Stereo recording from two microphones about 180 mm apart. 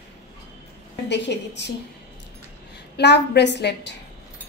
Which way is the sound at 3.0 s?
70° left (ahead or behind).